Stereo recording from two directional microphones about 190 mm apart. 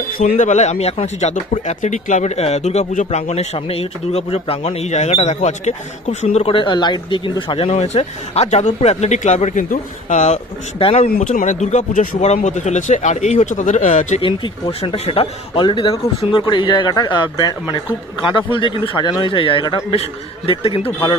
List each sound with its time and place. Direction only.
0.2 s speech: 40° left (ahead or behind)
14.2 s speech: 30° left (ahead or behind)